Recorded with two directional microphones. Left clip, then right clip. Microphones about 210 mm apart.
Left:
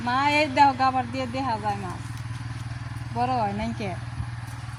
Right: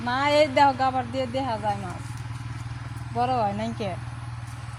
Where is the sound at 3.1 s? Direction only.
20° right (ahead or behind).